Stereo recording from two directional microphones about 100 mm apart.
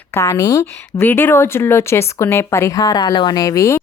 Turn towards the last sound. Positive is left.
turn(degrees=35)  # may be behind; listen again after turning